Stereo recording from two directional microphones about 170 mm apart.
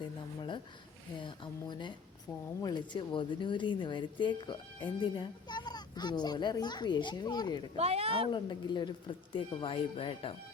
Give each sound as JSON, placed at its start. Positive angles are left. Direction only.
{"t": 0.0, "sound": "speech", "side_deg": 30}
{"t": 7.8, "sound": "speech", "side_deg": -35}
{"t": 8.3, "sound": "speech", "side_deg": 25}